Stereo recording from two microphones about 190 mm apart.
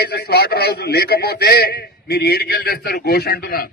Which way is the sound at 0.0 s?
60° left (ahead or behind).